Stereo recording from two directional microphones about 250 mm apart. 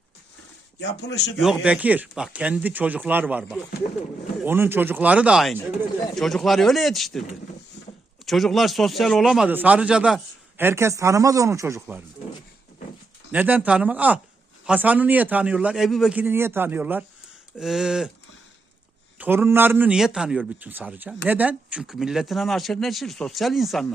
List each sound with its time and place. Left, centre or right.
0.8 s a man's voice: left
1.4 s a man's voice: centre
8.3 s a man's voice: centre
13.3 s a man's voice: centre
19.2 s a man's voice: centre